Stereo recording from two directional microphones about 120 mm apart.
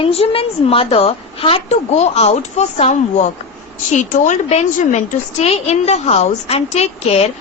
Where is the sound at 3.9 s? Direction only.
90° left; by 7.3 s 60° left (ahead or behind).